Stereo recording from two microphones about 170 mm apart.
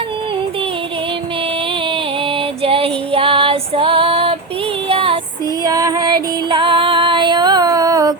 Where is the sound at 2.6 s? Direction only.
35° right (ahead or behind).